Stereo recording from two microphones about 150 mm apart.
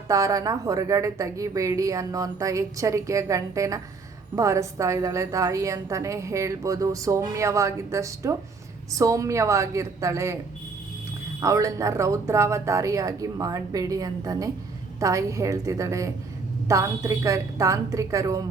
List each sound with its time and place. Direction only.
0.1 s a woman's voice: 25° right (ahead or behind)
11.3 s a woman's voice: 20° right (ahead or behind)